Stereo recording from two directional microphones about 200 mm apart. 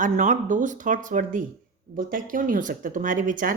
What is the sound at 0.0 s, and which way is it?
A woman's voice, 40° right (ahead or behind).